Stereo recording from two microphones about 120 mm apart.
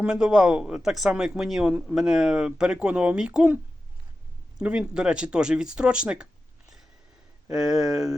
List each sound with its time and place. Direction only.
0.0 s speech: 5° right (ahead or behind)
4.6 s speech: 5° right (ahead or behind)
7.5 s speech: 5° right (ahead or behind)